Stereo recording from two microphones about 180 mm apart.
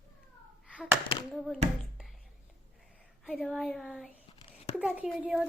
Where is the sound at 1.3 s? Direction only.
Centre (ahead or behind).